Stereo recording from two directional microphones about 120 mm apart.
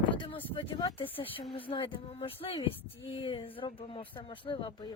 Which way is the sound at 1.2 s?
40° left (ahead or behind).